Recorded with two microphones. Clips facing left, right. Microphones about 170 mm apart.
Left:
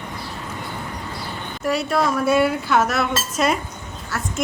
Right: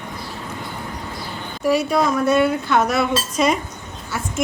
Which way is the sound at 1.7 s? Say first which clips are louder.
Right 3 dB; centre (ahead or behind).